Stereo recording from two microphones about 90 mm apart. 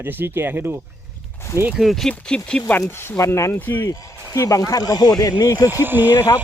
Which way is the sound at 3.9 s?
40° left (ahead or behind).